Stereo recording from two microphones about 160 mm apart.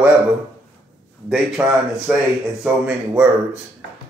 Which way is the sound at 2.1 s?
5° right (ahead or behind).